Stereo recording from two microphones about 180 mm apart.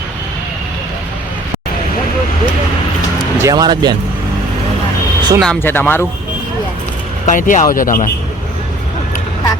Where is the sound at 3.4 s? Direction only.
20° right (ahead or behind).